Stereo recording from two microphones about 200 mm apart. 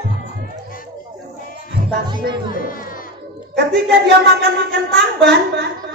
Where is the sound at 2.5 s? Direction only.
45° left (ahead or behind).